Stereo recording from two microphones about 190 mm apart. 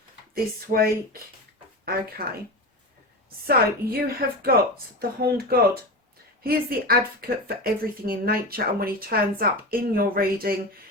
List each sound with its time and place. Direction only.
0.3 s speech: 50° right (ahead or behind)
3.4 s speech: 50° right (ahead or behind)